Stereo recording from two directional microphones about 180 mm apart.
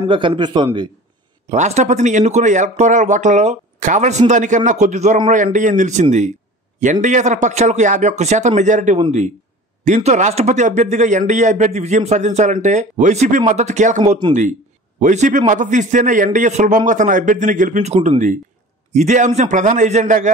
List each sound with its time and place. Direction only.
0.1 s a man's voice: 30° right (ahead or behind)
1.5 s speech: 40° right (ahead or behind)